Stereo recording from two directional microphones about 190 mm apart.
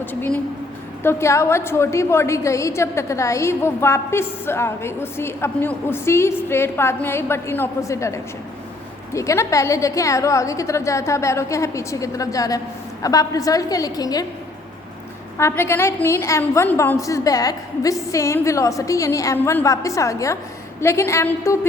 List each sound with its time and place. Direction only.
0.0 s a woman's voice: 10° left (ahead or behind)
15.4 s a woman's voice: 15° left (ahead or behind)